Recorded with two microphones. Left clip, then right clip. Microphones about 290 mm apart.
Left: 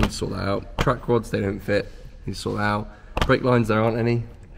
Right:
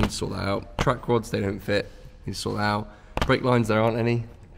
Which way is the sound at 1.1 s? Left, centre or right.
Centre.